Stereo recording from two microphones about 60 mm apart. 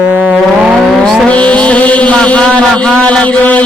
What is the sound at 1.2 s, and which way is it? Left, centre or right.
Mantra, left.